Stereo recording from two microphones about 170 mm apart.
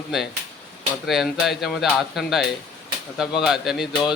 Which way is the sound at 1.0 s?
Centre (ahead or behind).